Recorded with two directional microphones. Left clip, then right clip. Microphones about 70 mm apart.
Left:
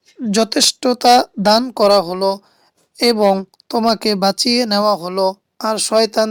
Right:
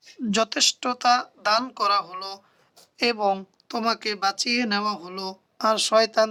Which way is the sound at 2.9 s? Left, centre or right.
Left.